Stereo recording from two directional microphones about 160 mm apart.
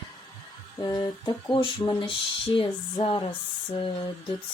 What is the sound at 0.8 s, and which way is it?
Speech, 25° left (ahead or behind).